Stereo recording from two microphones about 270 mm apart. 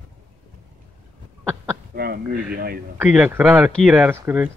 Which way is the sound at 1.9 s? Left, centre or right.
Right.